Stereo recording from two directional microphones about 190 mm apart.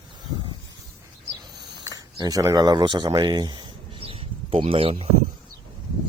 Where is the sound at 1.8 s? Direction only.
20° right (ahead or behind).